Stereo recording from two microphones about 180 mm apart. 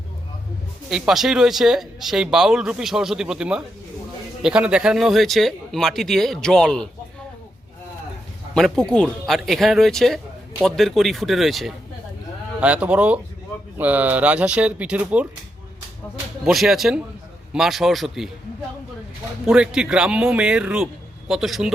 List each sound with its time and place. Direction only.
0.9 s speech: centre (ahead or behind)
8.5 s speech: 5° left (ahead or behind)
16.4 s speech: centre (ahead or behind)
19.5 s speech: 5° right (ahead or behind)